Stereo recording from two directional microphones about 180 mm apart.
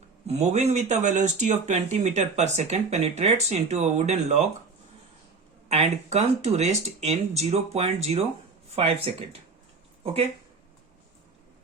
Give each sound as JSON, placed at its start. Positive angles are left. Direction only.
{"t": 0.3, "sound": "speech", "side_deg": -35}
{"t": 5.6, "sound": "speech", "side_deg": -35}